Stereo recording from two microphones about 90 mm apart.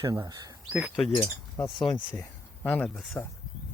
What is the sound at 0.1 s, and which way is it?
Speech, 40° right (ahead or behind).